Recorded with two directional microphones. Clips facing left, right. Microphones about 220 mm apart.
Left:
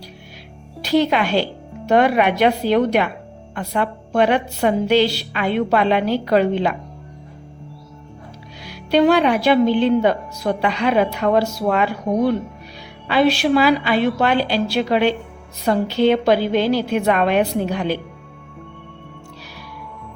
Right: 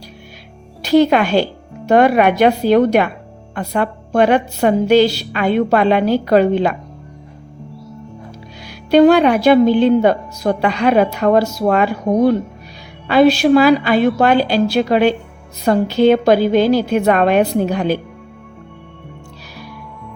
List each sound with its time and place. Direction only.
0.8 s a woman's voice: 45° right (ahead or behind)
8.6 s a woman's voice: 45° right (ahead or behind)